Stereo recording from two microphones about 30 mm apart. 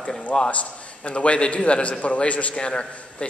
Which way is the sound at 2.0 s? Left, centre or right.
Left.